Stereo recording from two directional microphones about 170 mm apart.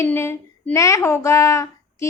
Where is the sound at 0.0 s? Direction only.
15° left (ahead or behind).